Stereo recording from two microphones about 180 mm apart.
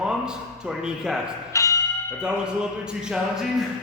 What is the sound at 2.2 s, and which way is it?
Speech, 5° right (ahead or behind).